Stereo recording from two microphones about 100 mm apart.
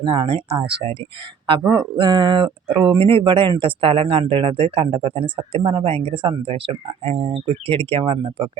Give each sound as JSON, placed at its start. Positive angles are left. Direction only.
{"t": 0.0, "sound": "speech", "side_deg": -55}
{"t": 1.7, "sound": "speech", "side_deg": -50}